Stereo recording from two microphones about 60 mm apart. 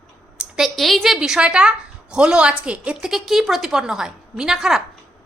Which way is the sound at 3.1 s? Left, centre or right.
Centre.